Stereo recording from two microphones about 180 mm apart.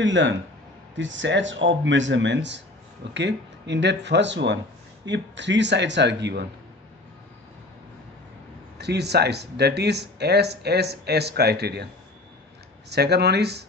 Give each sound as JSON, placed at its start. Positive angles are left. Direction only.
{"t": 0.0, "sound": "speech", "side_deg": -90}
{"t": 8.7, "sound": "speech", "side_deg": -70}
{"t": 12.9, "sound": "speech", "side_deg": -65}